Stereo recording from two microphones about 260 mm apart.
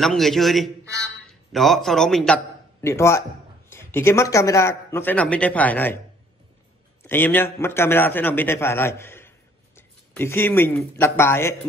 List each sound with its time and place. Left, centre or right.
0.0 s a man's voice: centre
7.0 s a man's voice: centre